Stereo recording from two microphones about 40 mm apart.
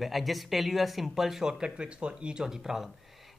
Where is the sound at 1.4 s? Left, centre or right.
Centre.